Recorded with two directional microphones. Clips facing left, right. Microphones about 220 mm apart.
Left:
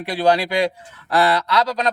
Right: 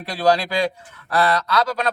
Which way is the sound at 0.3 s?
15° left (ahead or behind).